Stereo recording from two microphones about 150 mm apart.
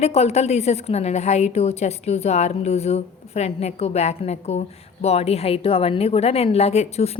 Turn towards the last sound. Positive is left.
turn(degrees=45)  # may be behind; listen again after turning